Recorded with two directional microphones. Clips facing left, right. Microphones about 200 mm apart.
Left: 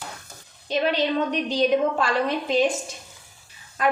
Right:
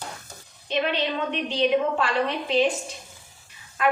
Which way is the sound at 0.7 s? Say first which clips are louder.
Left 3 dB; 40° left (ahead or behind).